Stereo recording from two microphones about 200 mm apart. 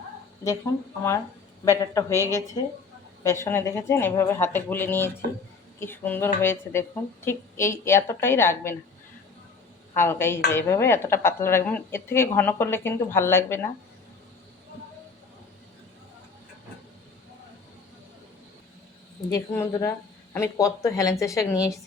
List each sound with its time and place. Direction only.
1.6 s speech: 15° left (ahead or behind)
9.9 s speech: 10° left (ahead or behind)
19.3 s speech: 15° left (ahead or behind)